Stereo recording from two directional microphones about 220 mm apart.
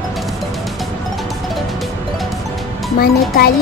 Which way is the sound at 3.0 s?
45° left (ahead or behind).